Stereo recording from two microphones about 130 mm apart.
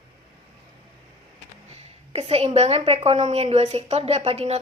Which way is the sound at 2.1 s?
50° right (ahead or behind).